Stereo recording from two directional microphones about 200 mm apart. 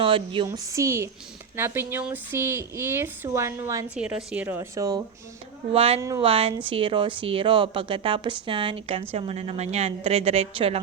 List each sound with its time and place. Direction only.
0.0 s speech: 25° right (ahead or behind)
0.4 s speech: 15° right (ahead or behind)
3.9 s speech: 5° right (ahead or behind)
5.7 s speech: 30° right (ahead or behind)
6.0 s speech: 20° right (ahead or behind)